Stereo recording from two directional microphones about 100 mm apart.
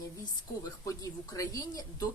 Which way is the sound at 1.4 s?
35° left (ahead or behind).